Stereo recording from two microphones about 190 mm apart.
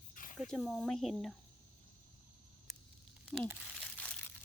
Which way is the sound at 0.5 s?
Centre (ahead or behind).